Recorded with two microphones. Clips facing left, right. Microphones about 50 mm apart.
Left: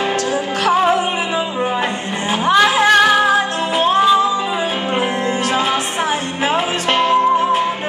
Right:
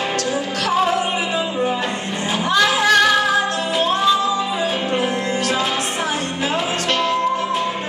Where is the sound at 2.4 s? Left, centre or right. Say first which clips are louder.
Left 4 dB; left.